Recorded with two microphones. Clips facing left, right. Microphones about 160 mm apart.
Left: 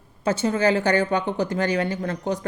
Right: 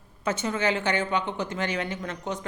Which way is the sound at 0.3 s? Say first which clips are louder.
Left 6 dB; 35° left (ahead or behind).